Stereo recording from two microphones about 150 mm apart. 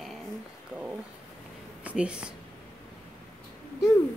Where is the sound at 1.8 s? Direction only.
5° right (ahead or behind).